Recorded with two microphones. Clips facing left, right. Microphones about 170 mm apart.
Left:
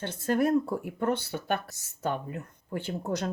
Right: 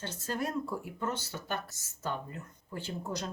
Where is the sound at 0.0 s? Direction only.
60° left (ahead or behind).